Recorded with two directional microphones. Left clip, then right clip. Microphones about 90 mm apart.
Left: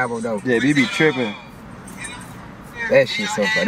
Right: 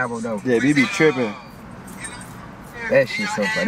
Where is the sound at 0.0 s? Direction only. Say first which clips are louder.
Left 2 dB; 10° left (ahead or behind).